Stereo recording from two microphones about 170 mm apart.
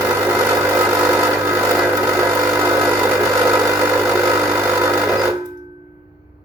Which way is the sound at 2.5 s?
10° right (ahead or behind).